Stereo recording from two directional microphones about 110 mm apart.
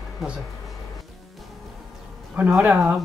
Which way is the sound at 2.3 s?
15° right (ahead or behind).